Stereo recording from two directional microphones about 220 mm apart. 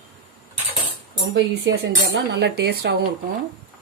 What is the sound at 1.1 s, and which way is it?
A woman's voice, 50° right (ahead or behind).